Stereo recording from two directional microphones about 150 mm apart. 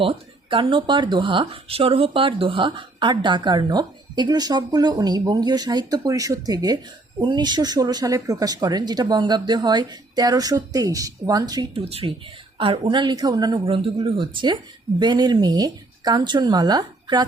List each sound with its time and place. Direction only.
0.0 s speech: 35° right (ahead or behind)
11.7 s speech: 40° right (ahead or behind)